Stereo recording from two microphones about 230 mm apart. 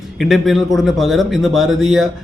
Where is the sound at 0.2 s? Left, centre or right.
Centre.